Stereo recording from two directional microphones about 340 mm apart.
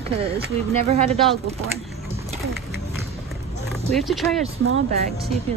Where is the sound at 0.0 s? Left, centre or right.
Centre.